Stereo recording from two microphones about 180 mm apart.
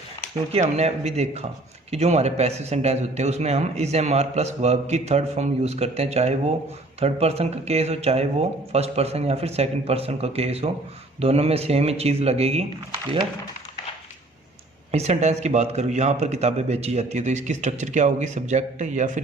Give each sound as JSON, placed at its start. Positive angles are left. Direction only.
{"t": 0.5, "sound": "a man's voice", "side_deg": -35}
{"t": 14.9, "sound": "a man's voice", "side_deg": -35}